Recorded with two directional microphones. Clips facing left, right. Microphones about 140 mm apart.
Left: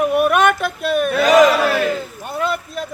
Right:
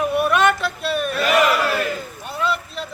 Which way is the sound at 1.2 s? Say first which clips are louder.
Left 6 dB; 90° left.